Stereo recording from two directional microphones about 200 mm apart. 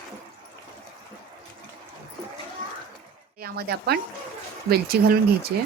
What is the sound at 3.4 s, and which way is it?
Speech, 50° right (ahead or behind).